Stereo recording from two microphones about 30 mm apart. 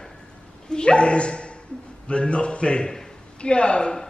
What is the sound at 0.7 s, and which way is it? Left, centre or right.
Speech, left.